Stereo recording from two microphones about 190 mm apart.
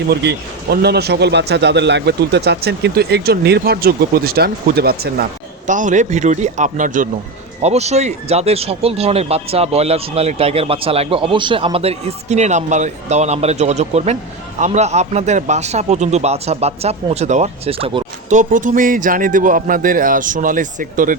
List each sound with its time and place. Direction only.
0.1 s a man's voice: 60° right (ahead or behind)
5.6 s a man's voice: 40° right (ahead or behind)